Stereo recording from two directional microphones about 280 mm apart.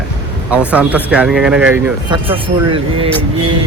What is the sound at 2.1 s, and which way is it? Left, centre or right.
Speech, centre.